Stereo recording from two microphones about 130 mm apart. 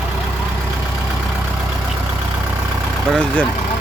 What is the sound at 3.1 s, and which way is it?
Speech, 5° left (ahead or behind).